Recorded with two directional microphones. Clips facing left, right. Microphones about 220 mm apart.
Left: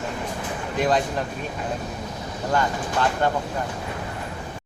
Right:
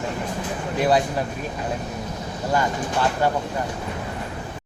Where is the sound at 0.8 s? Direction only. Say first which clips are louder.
Right 2 dB; 10° right (ahead or behind).